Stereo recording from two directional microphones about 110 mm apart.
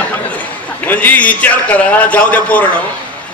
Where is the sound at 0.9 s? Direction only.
15° left (ahead or behind).